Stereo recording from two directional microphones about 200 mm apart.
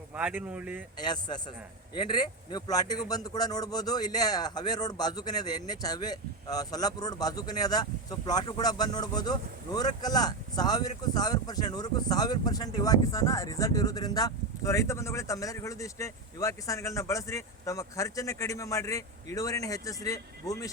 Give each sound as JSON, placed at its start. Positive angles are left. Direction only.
{"t": 0.1, "sound": "speech", "side_deg": -5}
{"t": 0.9, "sound": "a man's voice", "side_deg": 20}